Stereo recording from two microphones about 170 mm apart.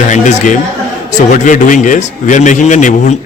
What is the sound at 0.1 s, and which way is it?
A man's voice, 45° left (ahead or behind).